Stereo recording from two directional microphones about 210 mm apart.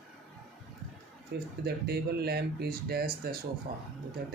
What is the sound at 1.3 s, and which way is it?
Speech, 50° right (ahead or behind).